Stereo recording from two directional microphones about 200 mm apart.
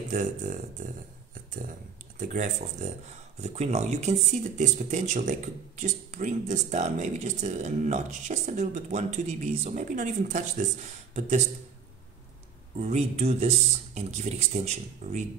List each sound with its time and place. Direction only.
0.1 s speech: 40° right (ahead or behind)
2.1 s speech: 40° right (ahead or behind)
12.7 s speech: 35° right (ahead or behind)